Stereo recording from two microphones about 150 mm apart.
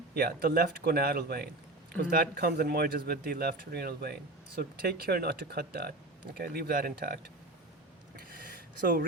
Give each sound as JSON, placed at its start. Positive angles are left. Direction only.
{"t": 0.1, "sound": "speech", "side_deg": -90}
{"t": 2.0, "sound": "speech", "side_deg": -70}
{"t": 8.1, "sound": "a sound", "side_deg": -75}